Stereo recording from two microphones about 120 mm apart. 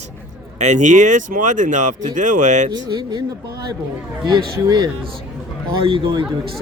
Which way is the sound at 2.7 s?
35° right (ahead or behind).